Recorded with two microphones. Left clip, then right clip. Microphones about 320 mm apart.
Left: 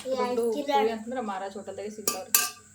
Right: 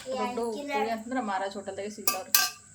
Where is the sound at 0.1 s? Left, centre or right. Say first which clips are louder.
Left 4 dB; centre.